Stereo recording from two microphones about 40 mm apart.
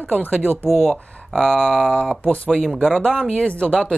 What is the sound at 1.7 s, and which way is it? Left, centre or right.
Speech, left.